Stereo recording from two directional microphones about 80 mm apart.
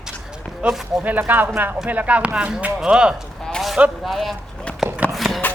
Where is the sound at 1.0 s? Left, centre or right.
Right.